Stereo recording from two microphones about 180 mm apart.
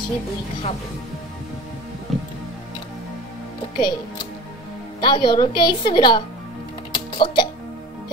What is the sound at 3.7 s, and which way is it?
Speech, 25° left (ahead or behind).